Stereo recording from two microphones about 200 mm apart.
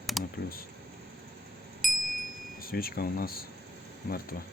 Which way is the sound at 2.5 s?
45° left (ahead or behind).